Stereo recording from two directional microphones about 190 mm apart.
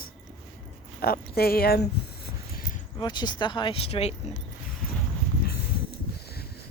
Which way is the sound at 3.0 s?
25° left (ahead or behind).